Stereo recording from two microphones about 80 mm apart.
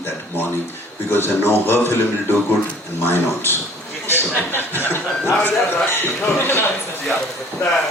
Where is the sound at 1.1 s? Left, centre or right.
Left.